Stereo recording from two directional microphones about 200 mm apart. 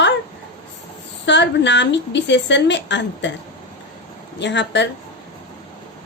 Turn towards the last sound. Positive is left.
turn(degrees=60)  # may be behind; listen again after turning